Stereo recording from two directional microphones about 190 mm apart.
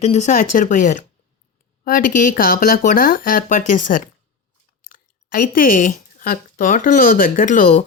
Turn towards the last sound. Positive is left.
turn(degrees=40)  # may be behind; listen again after turning